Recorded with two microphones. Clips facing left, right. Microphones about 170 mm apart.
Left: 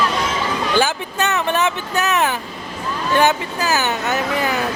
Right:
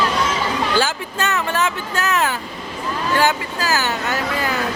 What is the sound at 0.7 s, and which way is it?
Vehicle, 20° left (ahead or behind).